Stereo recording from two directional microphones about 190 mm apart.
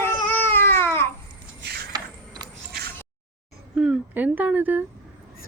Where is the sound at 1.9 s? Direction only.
20° right (ahead or behind).